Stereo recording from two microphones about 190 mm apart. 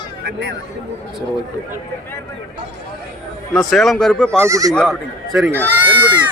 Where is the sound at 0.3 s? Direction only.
60° right (ahead or behind).